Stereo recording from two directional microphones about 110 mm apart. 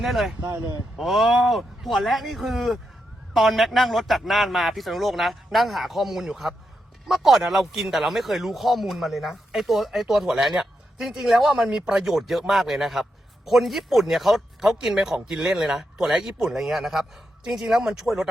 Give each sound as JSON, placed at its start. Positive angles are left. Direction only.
{"t": 0.0, "sound": "a man's voice", "side_deg": 0}
{"t": 0.4, "sound": "speech", "side_deg": -30}
{"t": 0.9, "sound": "a man's voice", "side_deg": 0}